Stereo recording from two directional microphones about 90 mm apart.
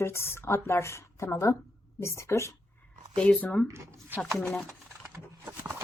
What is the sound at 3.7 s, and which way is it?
Speech, 35° right (ahead or behind).